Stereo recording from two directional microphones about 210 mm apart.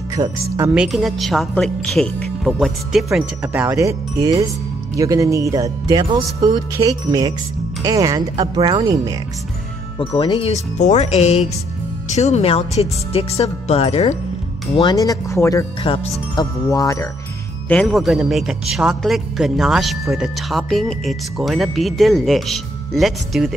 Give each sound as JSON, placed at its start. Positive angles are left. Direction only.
{"t": 0.1, "sound": "speech", "side_deg": -15}
{"t": 9.9, "sound": "speech", "side_deg": 25}
{"t": 15.8, "sound": "speech", "side_deg": 25}
{"t": 17.6, "sound": "speech", "side_deg": 5}